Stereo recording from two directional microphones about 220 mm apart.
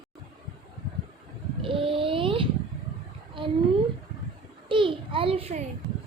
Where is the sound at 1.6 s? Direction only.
25° right (ahead or behind).